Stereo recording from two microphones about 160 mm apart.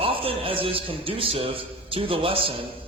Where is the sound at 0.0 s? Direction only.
35° right (ahead or behind).